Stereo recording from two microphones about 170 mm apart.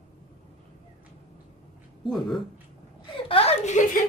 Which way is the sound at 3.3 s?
35° left (ahead or behind).